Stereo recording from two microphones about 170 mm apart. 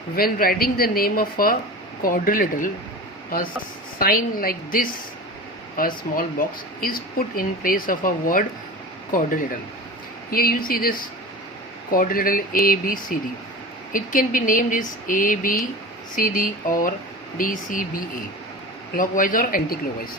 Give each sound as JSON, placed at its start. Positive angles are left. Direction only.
{"t": 0.2, "sound": "speech", "side_deg": 60}
{"t": 3.9, "sound": "speech", "side_deg": 60}
{"t": 10.3, "sound": "speech", "side_deg": 60}